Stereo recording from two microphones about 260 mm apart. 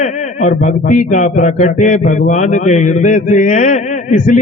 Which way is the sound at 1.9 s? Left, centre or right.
Left.